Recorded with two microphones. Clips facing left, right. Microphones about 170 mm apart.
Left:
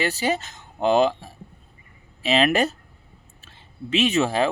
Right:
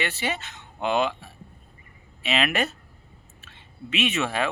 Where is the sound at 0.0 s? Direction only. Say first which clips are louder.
Left 5 dB; 40° left (ahead or behind).